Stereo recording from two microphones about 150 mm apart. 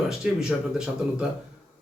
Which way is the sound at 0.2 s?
5° right (ahead or behind).